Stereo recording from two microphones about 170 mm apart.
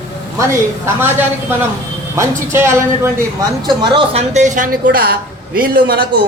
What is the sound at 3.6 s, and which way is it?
A woman's voice, 30° right (ahead or behind).